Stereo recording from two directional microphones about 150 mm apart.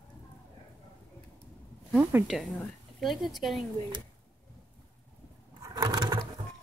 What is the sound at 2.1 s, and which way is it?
Speech, 15° right (ahead or behind).